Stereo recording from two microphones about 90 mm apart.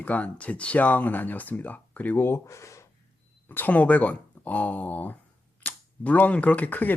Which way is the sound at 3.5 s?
20° left (ahead or behind).